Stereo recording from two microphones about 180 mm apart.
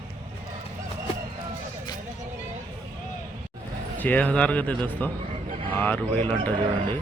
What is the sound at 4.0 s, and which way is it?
Speech, 10° left (ahead or behind).